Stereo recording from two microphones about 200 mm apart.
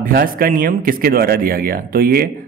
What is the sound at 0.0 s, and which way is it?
Speech, 45° right (ahead or behind).